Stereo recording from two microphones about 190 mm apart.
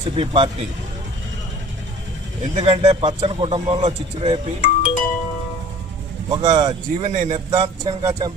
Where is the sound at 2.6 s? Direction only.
35° right (ahead or behind).